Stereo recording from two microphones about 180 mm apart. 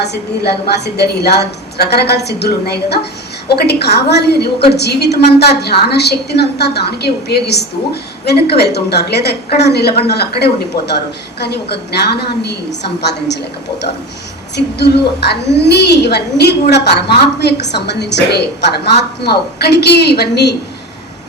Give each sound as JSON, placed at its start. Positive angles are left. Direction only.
{"t": 0.0, "sound": "a woman's voice", "side_deg": 65}
{"t": 14.5, "sound": "a woman's voice", "side_deg": 70}